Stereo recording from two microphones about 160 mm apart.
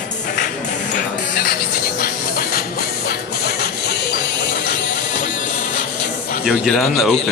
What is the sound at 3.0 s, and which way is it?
Music, 80° left.